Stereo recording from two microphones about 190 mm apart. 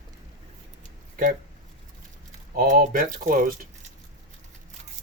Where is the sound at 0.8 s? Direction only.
45° right (ahead or behind).